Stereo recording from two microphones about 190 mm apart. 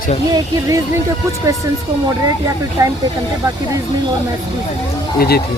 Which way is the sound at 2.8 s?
20° right (ahead or behind).